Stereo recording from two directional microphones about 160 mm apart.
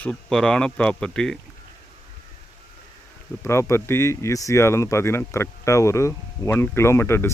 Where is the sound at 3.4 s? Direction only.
15° left (ahead or behind).